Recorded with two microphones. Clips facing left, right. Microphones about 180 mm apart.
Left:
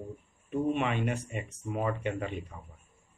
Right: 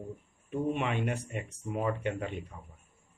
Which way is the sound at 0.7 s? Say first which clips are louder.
Left 1 dB; 10° right (ahead or behind).